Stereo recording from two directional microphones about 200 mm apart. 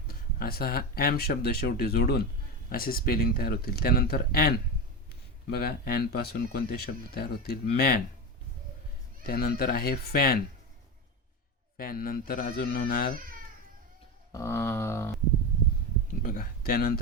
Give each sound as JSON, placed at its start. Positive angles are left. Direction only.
{"t": 0.1, "sound": "speech", "side_deg": 50}
{"t": 9.2, "sound": "speech", "side_deg": 50}
{"t": 11.8, "sound": "speech", "side_deg": 45}
{"t": 14.3, "sound": "a sound", "side_deg": 15}
{"t": 16.2, "sound": "speech", "side_deg": 45}